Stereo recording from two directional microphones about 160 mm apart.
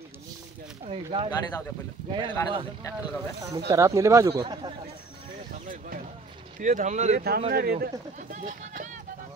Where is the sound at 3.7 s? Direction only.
20° right (ahead or behind).